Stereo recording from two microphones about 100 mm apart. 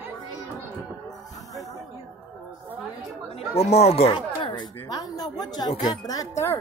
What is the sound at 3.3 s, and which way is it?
Speech, 90° left.